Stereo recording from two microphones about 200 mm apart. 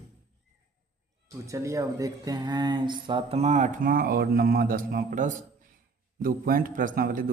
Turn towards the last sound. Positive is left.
turn(degrees=-45)  # may be behind; listen again after turning